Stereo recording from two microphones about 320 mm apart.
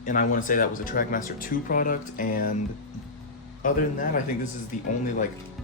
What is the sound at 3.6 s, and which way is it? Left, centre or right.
Speech, left.